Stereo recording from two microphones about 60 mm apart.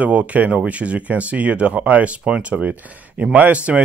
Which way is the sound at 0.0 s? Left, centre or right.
Right.